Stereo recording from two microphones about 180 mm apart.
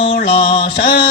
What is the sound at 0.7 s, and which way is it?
Music, 60° left (ahead or behind).